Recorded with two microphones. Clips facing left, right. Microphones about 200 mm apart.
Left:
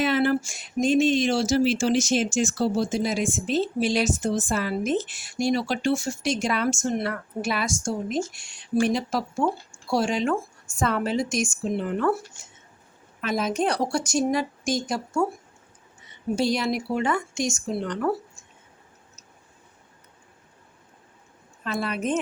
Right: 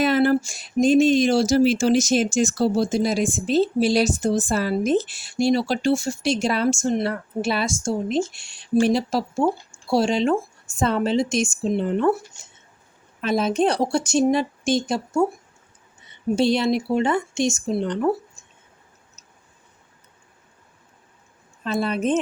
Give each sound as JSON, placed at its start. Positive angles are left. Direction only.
{"t": 0.0, "sound": "a woman's voice", "side_deg": -40}
{"t": 13.2, "sound": "a woman's voice", "side_deg": -30}
{"t": 16.3, "sound": "a woman's voice", "side_deg": -25}
{"t": 21.6, "sound": "a woman's voice", "side_deg": -25}